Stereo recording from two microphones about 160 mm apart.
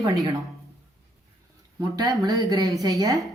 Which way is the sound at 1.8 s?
20° right (ahead or behind).